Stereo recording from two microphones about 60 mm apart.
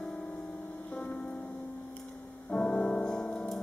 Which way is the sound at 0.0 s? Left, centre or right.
Centre.